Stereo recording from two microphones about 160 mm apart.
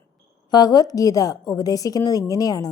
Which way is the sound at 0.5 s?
25° left (ahead or behind).